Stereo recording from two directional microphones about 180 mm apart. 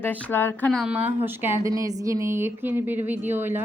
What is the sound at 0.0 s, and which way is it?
A woman's voice, 10° left (ahead or behind).